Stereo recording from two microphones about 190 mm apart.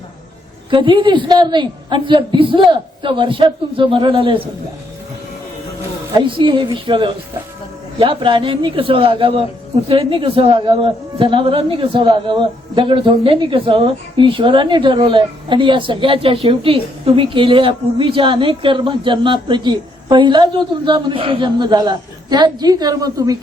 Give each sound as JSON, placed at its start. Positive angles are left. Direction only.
{"t": 0.7, "sound": "a man's voice", "side_deg": -25}
{"t": 6.2, "sound": "a man's voice", "side_deg": -25}